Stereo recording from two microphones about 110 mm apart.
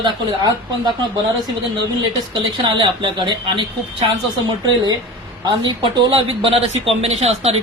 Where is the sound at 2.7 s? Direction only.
45° right (ahead or behind).